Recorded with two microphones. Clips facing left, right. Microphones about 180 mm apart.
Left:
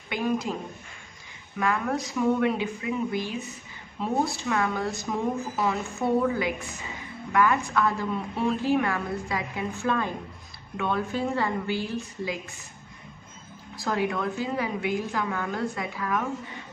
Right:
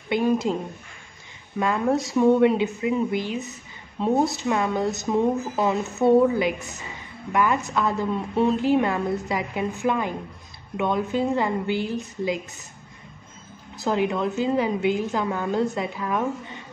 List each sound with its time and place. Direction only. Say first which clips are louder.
0.1 s speech: right 6 dB; 25° right (ahead or behind)
1.6 s speech: right 5 dB; 25° right (ahead or behind)
7.7 s speech: right 2 dB; 20° right (ahead or behind)
13.8 s speech: right 4 dB; 25° right (ahead or behind)